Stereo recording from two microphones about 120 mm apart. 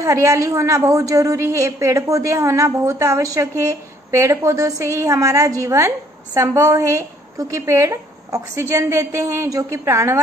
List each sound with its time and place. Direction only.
0.0 s a woman's voice: 25° right (ahead or behind)